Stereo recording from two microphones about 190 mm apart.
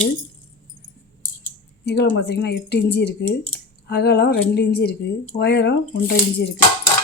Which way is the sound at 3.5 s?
60° left (ahead or behind).